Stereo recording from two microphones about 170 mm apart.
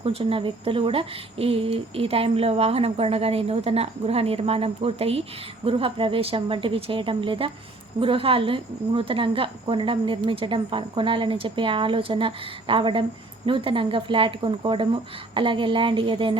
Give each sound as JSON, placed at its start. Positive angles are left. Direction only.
{"t": 0.0, "sound": "a woman's voice", "side_deg": -35}